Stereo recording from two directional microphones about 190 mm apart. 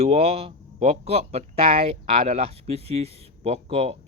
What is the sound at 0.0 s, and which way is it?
Speech, 35° right (ahead or behind).